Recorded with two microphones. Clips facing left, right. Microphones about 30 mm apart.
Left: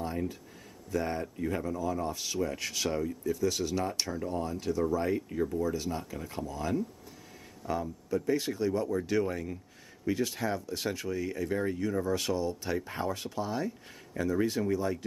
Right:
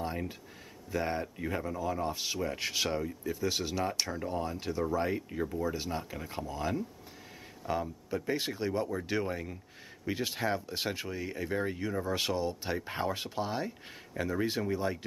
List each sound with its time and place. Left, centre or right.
0.0 s a sound: right
0.9 s speech: centre
3.9 s speech: centre
4.2 s speech: centre